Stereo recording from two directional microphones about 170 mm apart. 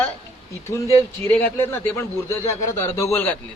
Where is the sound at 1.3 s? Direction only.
10° left (ahead or behind).